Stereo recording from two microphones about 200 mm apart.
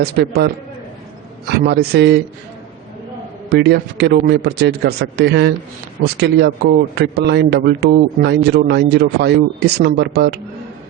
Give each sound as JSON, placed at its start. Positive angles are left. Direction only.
{"t": 0.0, "sound": "a man's voice", "side_deg": -50}
{"t": 3.5, "sound": "speech", "side_deg": -55}